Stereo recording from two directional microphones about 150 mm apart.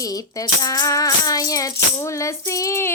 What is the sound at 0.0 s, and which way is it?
Music, 25° left (ahead or behind).